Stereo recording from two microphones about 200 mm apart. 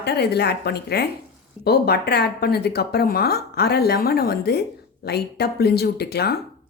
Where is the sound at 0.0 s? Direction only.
55° left (ahead or behind).